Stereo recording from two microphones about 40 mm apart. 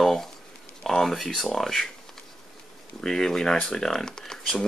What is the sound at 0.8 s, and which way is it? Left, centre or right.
Speech, centre.